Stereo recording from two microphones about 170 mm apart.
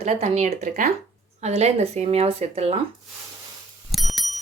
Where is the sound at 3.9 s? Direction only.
Centre (ahead or behind).